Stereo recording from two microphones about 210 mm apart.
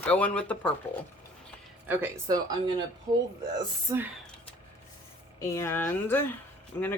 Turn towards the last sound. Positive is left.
turn(degrees=10)  # may be behind; listen again after turning